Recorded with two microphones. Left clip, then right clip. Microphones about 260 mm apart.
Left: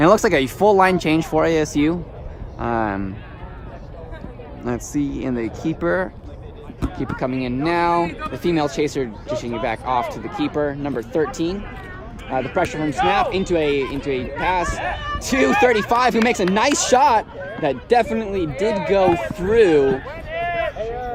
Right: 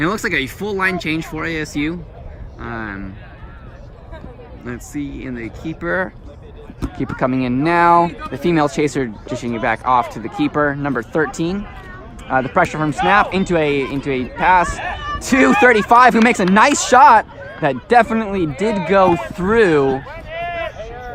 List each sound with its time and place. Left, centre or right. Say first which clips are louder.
0.0 s speech: left 4 dB; centre
2.6 s a sound: left 6 dB; centre
4.6 s speech: left 4 dB; centre
6.7 s speech: right 3 dB; centre
14.8 s speech: right 1 dB; left
15.3 s speech: right 4 dB; centre
20.1 s a sound: left 1 dB; left